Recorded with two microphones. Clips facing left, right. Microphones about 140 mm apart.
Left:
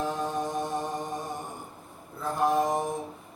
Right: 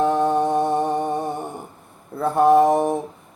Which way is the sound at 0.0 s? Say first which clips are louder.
Right 11 dB; 65° right (ahead or behind).